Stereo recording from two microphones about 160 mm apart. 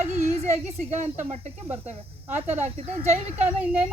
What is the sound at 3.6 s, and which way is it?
Speech, 10° right (ahead or behind).